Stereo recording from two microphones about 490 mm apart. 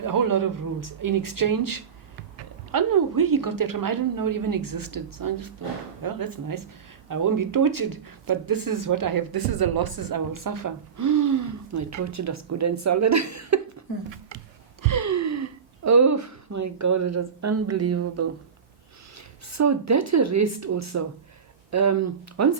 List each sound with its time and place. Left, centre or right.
0.0 s speech: right
14.3 s a sound: right
19.5 s speech: right